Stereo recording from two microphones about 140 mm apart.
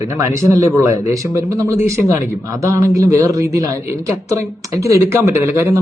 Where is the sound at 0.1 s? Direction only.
20° right (ahead or behind).